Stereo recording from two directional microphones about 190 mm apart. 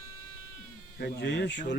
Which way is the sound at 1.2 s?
65° left (ahead or behind).